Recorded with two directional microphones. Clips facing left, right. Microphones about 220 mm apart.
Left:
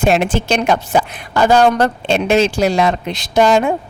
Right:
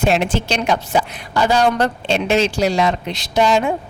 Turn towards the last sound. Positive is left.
turn(degrees=50)  # may be behind; listen again after turning